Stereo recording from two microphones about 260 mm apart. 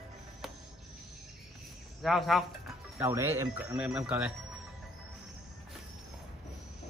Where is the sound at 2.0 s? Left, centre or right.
Centre.